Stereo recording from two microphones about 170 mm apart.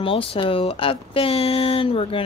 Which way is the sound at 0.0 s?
35° left (ahead or behind).